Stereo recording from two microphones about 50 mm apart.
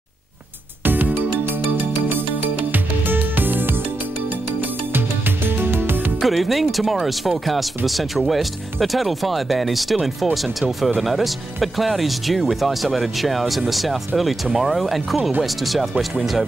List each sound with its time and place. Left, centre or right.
0.8 s music: right
2.7 s music: right
5.6 s music: right
6.2 s speech: centre